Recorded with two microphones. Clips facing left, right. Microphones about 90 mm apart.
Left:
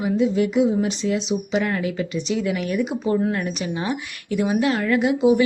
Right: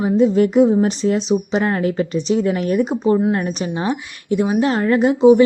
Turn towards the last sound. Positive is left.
turn(degrees=-35)  # may be behind; listen again after turning